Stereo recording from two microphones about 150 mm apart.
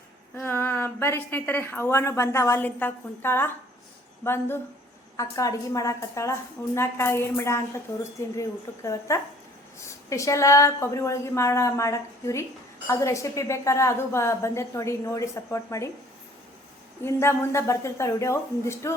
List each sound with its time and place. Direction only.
0.3 s a woman's voice: 15° left (ahead or behind)
17.0 s a woman's voice: 15° left (ahead or behind)